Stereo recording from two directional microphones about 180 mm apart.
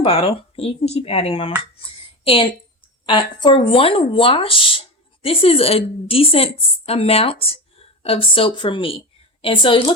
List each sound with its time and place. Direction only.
0.0 s speech: 30° left (ahead or behind)
1.8 s a sound: 30° left (ahead or behind)
3.1 s a woman's voice: 25° left (ahead or behind)